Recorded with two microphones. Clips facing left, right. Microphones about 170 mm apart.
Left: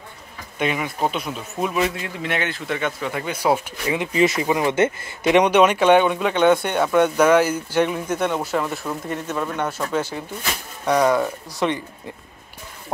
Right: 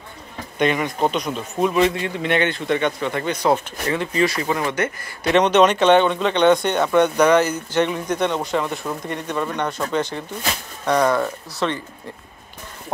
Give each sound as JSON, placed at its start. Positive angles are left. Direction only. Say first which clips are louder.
{"t": 0.6, "sound": "speech", "louder": "right 3 dB", "side_deg": 5}
{"t": 5.3, "sound": "speech", "louder": "even", "side_deg": 10}